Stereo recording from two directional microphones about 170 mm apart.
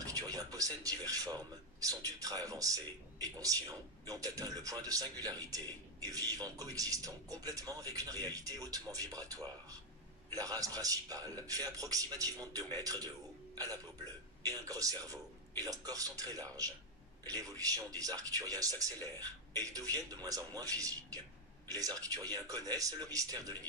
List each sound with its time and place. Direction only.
0.0 s speech: 20° right (ahead or behind)
14.4 s speech: 20° right (ahead or behind)